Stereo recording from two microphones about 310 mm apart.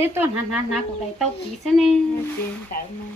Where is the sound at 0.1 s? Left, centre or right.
Centre.